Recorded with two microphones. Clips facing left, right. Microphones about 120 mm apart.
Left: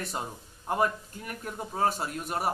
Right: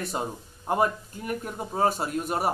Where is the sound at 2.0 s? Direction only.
25° right (ahead or behind).